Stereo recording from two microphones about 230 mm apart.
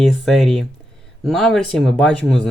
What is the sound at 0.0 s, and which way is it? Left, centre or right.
Speech, centre.